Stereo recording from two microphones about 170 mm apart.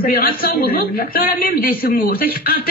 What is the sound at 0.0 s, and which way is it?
A man's voice, 60° left (ahead or behind).